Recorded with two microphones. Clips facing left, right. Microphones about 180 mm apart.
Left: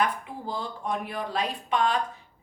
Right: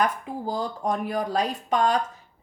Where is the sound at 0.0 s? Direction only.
40° right (ahead or behind).